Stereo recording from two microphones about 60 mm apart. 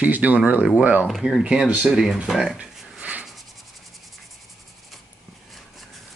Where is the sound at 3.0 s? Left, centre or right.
Right.